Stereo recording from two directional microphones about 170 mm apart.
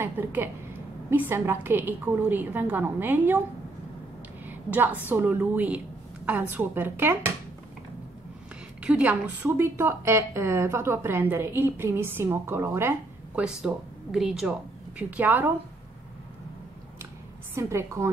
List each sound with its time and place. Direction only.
0.0 s a woman's voice: 10° right (ahead or behind)
4.5 s a woman's voice: 10° right (ahead or behind)
8.8 s a woman's voice: 5° right (ahead or behind)
17.6 s a woman's voice: 15° right (ahead or behind)